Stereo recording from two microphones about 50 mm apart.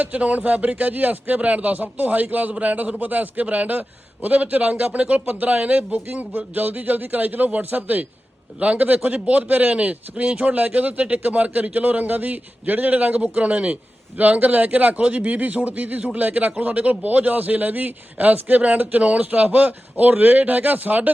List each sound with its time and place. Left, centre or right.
0.0 s a man's voice: right